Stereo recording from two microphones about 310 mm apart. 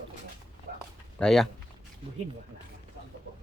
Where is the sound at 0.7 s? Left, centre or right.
Right.